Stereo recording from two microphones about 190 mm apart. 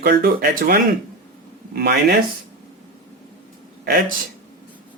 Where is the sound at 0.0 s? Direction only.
55° right (ahead or behind).